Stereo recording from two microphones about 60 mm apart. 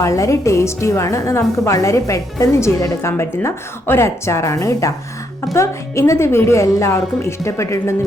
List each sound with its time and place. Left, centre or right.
0.0 s a woman's voice: left